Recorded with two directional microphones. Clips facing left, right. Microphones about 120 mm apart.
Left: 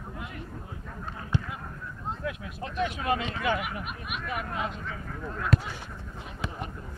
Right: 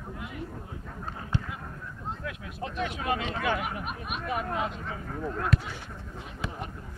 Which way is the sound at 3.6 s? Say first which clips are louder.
Right 2 dB; 35° right (ahead or behind).